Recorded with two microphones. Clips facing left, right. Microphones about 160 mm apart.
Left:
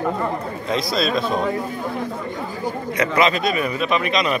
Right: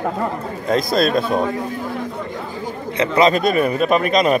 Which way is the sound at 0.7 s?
50° right (ahead or behind).